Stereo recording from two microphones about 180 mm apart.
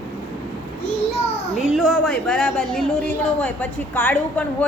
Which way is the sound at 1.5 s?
Centre (ahead or behind).